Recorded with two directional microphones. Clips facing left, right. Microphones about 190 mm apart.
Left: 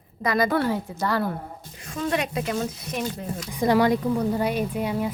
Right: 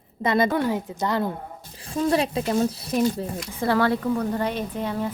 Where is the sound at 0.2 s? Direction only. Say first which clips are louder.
Right 1 dB; 25° right (ahead or behind).